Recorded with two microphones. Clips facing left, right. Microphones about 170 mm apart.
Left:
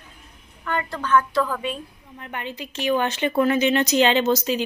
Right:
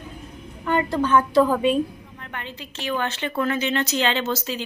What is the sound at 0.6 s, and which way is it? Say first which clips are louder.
A woman's voice: right 6 dB; 20° right (ahead or behind).